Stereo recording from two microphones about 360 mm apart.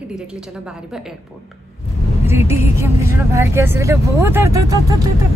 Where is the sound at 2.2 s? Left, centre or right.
Centre.